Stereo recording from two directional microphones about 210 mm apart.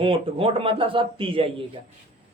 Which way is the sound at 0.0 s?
25° right (ahead or behind).